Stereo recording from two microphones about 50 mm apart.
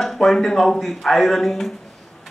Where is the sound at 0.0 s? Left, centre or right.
Centre.